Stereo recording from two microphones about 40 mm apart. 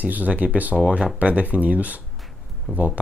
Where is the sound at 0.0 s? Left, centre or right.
Right.